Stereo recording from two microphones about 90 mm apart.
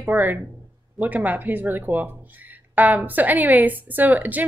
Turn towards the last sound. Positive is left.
turn(degrees=-20)  # may be behind; listen again after turning